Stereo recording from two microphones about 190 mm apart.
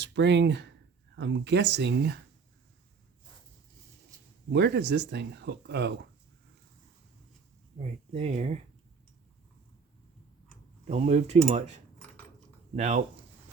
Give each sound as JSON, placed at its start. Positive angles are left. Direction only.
{"t": 0.0, "sound": "speech", "side_deg": -65}
{"t": 4.5, "sound": "speech", "side_deg": -60}
{"t": 7.8, "sound": "speech", "side_deg": -35}
{"t": 10.8, "sound": "speech", "side_deg": -35}
{"t": 12.7, "sound": "speech", "side_deg": -40}